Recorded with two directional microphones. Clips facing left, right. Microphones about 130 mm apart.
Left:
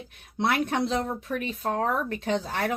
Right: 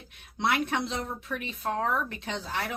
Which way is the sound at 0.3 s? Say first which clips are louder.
Left 3 dB; 45° left (ahead or behind).